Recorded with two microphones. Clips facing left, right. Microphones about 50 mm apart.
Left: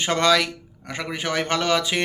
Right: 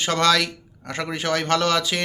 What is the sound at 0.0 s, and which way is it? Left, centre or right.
A man's voice, centre.